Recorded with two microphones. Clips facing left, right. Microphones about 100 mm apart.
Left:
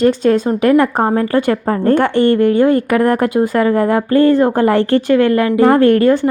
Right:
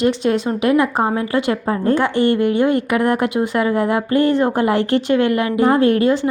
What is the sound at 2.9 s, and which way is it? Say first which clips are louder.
Speech: left 4 dB; 45° left (ahead or behind).